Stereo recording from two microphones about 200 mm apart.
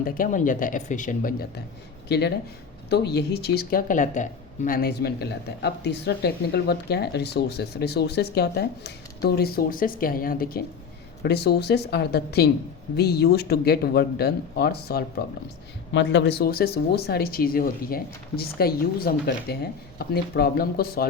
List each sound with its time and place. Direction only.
0.0 s speech: 45° left (ahead or behind)
15.9 s speech: 65° left (ahead or behind)